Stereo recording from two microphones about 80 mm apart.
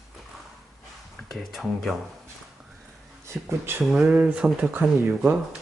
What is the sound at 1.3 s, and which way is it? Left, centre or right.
Speech, centre.